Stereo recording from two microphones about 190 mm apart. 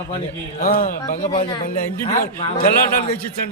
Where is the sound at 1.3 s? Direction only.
25° left (ahead or behind).